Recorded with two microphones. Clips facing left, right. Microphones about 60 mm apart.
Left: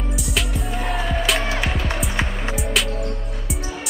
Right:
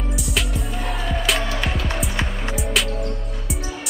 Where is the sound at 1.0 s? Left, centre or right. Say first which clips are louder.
Right 1 dB; centre.